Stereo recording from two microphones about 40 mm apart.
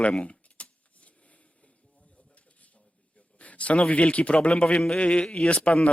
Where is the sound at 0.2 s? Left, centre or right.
Left.